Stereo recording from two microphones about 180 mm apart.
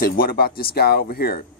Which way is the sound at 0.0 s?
55° left (ahead or behind).